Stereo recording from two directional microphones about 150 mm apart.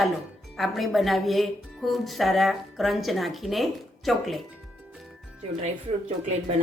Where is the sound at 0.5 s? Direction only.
Centre (ahead or behind).